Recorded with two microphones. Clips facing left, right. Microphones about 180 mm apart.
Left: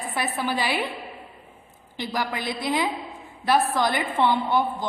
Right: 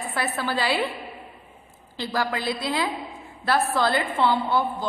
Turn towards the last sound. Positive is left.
turn(degrees=20)  # may be behind; listen again after turning